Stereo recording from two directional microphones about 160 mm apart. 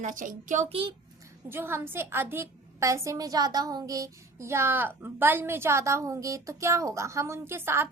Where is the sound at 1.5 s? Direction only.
15° right (ahead or behind).